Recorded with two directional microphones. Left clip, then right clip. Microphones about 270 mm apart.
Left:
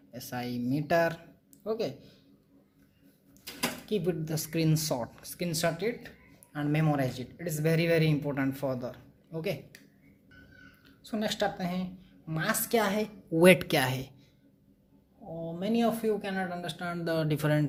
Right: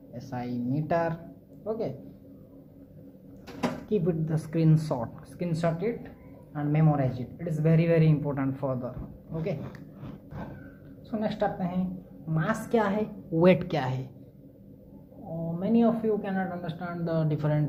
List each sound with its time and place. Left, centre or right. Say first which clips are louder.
0.1 s speech: right 1 dB; left
3.8 s speech: right 4 dB; left
11.1 s speech: right 2 dB; left
15.4 s speech: right 3 dB; left